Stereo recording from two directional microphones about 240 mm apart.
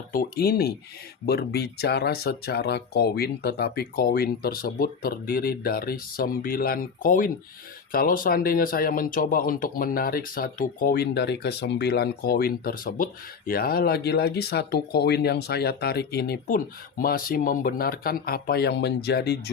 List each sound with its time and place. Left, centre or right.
0.1 s speech: left